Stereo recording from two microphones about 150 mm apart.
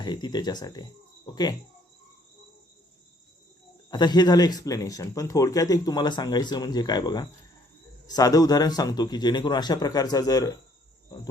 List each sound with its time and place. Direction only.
0.0 s speech: 30° left (ahead or behind)
3.8 s speech: 30° left (ahead or behind)